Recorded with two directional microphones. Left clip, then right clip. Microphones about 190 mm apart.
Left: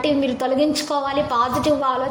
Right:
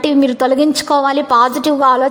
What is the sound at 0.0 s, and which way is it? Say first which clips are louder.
A woman's voice: right 7 dB; 40° right (ahead or behind).